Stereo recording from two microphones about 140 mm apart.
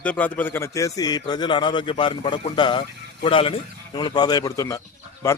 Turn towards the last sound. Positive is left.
turn(degrees=20)  # may be behind; listen again after turning